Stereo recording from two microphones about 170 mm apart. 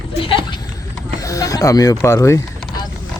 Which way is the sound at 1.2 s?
20° left (ahead or behind).